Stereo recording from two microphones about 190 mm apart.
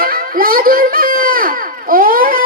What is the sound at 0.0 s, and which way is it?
Baby cry, 50° right (ahead or behind).